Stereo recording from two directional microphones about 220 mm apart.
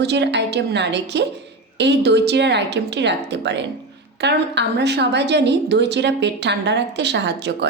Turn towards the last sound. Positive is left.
turn(degrees=-50)  # may be behind; listen again after turning